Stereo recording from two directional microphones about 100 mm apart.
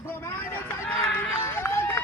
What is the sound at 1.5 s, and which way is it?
Run, 25° left (ahead or behind).